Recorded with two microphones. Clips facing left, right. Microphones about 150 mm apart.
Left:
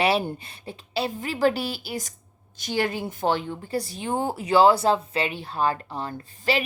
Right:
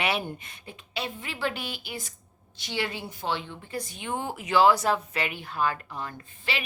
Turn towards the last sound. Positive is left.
turn(degrees=40)  # may be behind; listen again after turning